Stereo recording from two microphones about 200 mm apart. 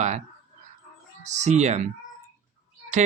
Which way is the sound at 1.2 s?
35° right (ahead or behind).